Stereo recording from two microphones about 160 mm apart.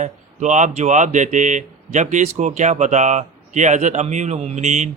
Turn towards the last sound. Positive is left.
turn(degrees=-50)  # may be behind; listen again after turning